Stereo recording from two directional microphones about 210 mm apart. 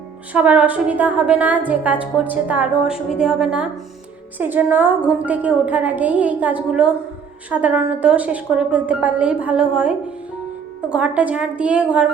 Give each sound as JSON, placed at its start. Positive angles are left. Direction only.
{"t": 0.3, "sound": "a woman's voice", "side_deg": -5}
{"t": 10.9, "sound": "a woman's voice", "side_deg": -5}